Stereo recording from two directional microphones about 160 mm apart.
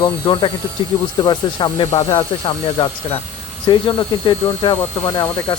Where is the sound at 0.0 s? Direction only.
30° left (ahead or behind).